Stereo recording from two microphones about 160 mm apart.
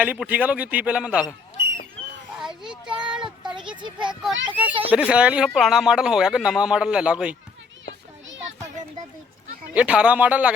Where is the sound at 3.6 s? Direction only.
30° right (ahead or behind).